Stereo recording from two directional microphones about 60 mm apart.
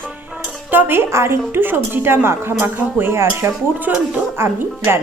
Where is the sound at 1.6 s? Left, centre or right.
Right.